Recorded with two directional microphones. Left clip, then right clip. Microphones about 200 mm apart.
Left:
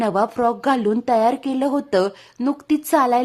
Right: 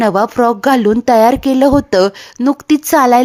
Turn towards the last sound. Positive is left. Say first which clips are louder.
# right 8 dB
turn(degrees=-30)  # may be behind; listen again after turning